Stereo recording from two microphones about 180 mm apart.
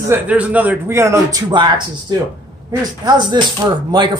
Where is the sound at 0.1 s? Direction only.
10° right (ahead or behind).